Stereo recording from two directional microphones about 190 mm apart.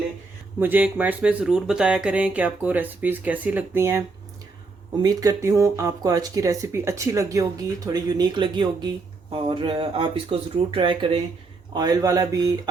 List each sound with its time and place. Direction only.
0.6 s speech: 10° right (ahead or behind)
5.0 s speech: 20° right (ahead or behind)